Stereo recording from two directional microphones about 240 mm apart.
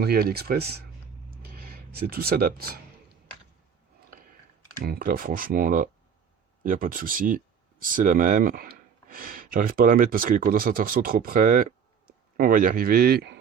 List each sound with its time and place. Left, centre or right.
0.0 s speech: right
1.3 s a sound: right
4.8 s speech: right